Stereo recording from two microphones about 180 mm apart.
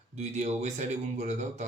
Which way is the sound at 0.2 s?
40° right (ahead or behind).